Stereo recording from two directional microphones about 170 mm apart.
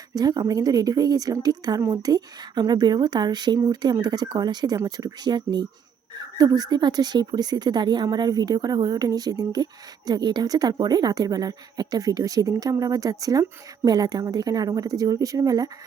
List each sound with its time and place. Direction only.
0.1 s a woman's voice: 25° right (ahead or behind)